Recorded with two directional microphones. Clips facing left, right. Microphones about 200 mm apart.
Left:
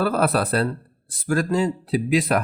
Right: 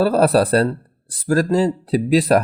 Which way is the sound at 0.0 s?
35° right (ahead or behind).